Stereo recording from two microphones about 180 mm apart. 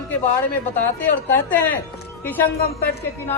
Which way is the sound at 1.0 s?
10° left (ahead or behind).